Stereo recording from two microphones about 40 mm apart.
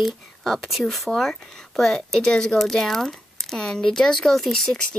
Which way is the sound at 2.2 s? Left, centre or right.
Left.